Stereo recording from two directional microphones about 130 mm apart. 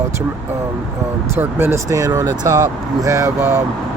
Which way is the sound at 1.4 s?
15° right (ahead or behind).